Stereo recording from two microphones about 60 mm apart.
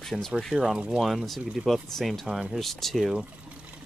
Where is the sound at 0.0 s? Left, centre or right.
Centre.